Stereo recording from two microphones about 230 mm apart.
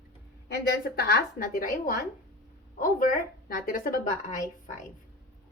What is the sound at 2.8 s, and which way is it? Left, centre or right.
A woman's voice, left.